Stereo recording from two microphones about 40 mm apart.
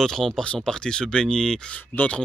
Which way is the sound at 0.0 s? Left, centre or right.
Centre.